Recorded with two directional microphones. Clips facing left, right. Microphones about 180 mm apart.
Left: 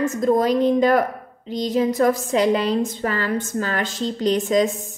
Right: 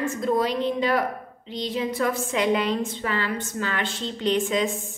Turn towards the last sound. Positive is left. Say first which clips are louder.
# left 6 dB
turn(degrees=40)  # may be behind; listen again after turning